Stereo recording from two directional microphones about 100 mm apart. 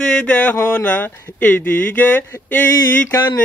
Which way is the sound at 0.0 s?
10° left (ahead or behind).